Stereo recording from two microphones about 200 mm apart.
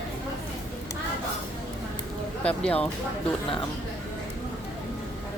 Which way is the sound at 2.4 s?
5° left (ahead or behind).